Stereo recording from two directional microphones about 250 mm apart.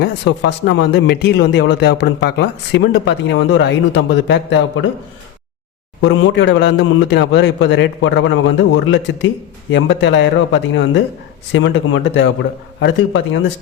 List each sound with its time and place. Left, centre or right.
0.0 s speech: left
6.0 s speech: left